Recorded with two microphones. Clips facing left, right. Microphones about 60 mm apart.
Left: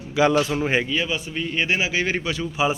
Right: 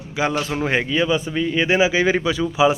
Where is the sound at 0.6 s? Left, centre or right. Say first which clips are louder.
Right 1 dB; right.